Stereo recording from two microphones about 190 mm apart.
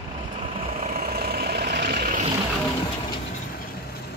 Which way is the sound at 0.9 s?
50° right (ahead or behind).